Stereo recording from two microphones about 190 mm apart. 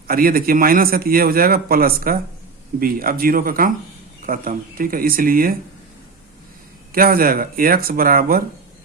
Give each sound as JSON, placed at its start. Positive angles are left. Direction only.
{"t": 0.1, "sound": "a man's voice", "side_deg": -50}
{"t": 6.9, "sound": "a man's voice", "side_deg": -50}